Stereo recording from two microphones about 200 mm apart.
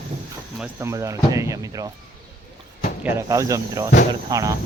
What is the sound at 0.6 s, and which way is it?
Speech, 15° right (ahead or behind).